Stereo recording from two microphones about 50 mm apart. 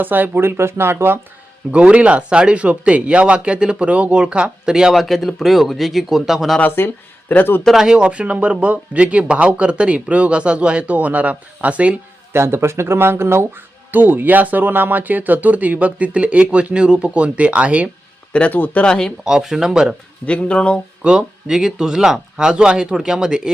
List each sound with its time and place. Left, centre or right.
0.0 s speech: right
1.7 s speech: right
4.9 s speech: centre
6.6 s speech: left
7.7 s speech: centre; by 11.9 s right
12.3 s speech: right
13.9 s speech: right
18.5 s speech: left
18.8 s speech: centre
19.2 s speech: centre
20.2 s speech: left
21.0 s speech: centre